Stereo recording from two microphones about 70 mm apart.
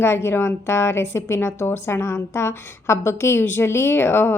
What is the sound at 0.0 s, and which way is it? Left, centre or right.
A woman's voice, left.